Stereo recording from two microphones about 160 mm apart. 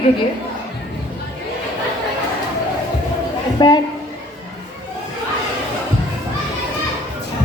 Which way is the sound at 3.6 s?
25° left (ahead or behind).